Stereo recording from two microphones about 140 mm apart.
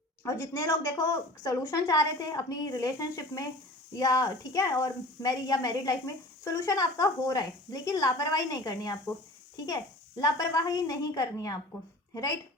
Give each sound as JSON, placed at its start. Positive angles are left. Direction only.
{"t": 0.2, "sound": "a woman's voice", "side_deg": 20}